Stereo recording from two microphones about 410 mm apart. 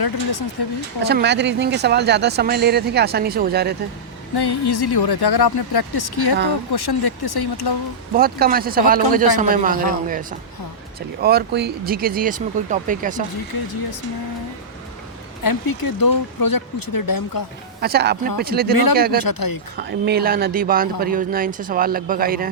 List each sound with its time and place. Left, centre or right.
0.0 s speech: left
1.0 s speech: right
4.4 s speech: left
8.1 s speech: right
11.2 s speech: right
15.4 s speech: left
17.7 s speech: right
18.7 s speech: left
18.9 s speech: right
19.2 s speech: left
19.7 s speech: right